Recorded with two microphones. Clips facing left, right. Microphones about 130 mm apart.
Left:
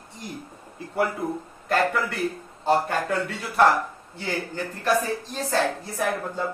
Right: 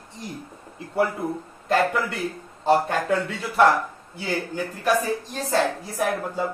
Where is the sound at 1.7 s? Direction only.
20° right (ahead or behind).